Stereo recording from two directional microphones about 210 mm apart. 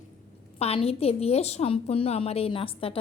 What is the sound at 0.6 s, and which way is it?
A woman's voice, 30° left (ahead or behind).